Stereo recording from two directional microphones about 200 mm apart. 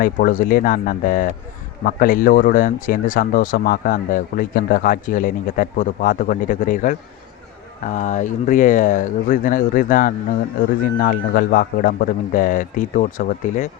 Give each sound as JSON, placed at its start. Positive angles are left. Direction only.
{"t": 0.0, "sound": "speech", "side_deg": 45}